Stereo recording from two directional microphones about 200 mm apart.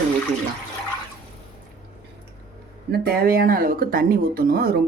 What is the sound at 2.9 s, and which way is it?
Speech, 50° right (ahead or behind).